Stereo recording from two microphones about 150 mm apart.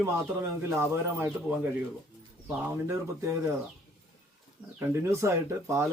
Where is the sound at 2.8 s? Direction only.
20° right (ahead or behind).